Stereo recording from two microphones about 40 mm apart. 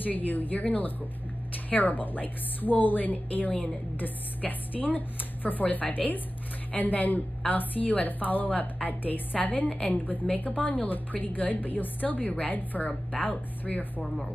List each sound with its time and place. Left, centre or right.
0.0 s a woman's voice: left